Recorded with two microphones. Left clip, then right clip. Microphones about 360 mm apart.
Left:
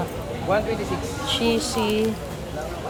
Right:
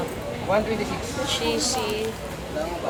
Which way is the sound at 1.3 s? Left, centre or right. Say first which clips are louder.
Left 3 dB; centre.